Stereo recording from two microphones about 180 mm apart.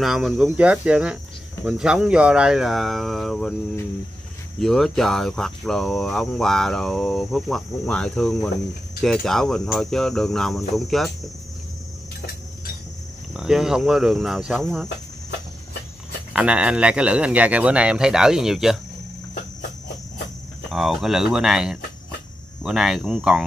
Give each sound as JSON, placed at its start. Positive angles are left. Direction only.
{"t": 0.0, "sound": "speech", "side_deg": 0}
{"t": 4.6, "sound": "speech", "side_deg": 0}
{"t": 13.3, "sound": "speech", "side_deg": -5}
{"t": 16.3, "sound": "speech", "side_deg": -5}
{"t": 20.7, "sound": "speech", "side_deg": 0}